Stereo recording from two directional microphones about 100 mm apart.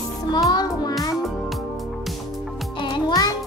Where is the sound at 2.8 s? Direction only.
45° left (ahead or behind).